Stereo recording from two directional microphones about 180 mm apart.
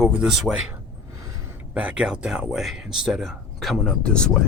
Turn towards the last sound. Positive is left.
turn(degrees=5)  # may be behind; listen again after turning